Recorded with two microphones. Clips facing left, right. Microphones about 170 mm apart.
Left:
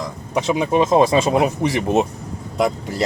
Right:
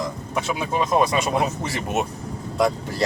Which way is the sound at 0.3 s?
20° left (ahead or behind).